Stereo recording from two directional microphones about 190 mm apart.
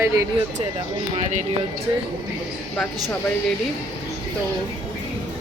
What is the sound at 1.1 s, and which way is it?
Speech, 40° right (ahead or behind).